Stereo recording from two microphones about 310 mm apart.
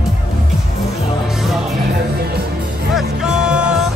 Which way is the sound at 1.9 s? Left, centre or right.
Right.